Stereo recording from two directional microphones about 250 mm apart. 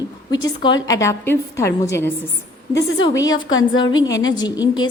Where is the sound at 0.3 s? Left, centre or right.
Centre.